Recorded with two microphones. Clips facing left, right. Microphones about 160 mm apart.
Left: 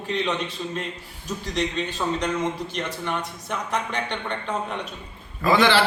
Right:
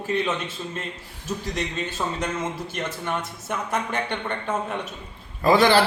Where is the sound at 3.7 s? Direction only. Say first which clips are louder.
Right 1 dB; 5° right (ahead or behind).